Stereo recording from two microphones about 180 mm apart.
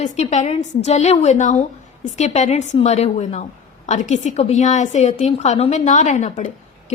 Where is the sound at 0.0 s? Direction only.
40° left (ahead or behind).